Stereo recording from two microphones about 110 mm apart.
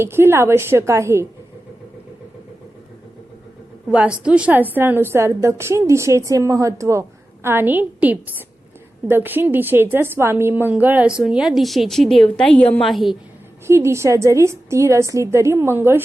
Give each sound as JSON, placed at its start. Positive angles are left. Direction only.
{"t": 0.0, "sound": "a woman's voice", "side_deg": -25}
{"t": 3.8, "sound": "a woman's voice", "side_deg": -10}
{"t": 12.8, "sound": "a woman's voice", "side_deg": 0}
{"t": 13.7, "sound": "a woman's voice", "side_deg": -25}